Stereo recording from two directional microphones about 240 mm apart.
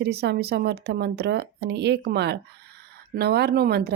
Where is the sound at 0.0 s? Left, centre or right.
Right.